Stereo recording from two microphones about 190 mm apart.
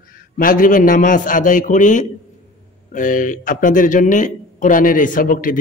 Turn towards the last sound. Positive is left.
turn(degrees=45)  # may be behind; listen again after turning